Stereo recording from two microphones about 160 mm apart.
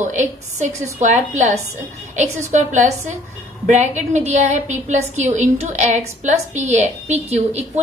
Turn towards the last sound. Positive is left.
turn(degrees=-45)  # may be behind; listen again after turning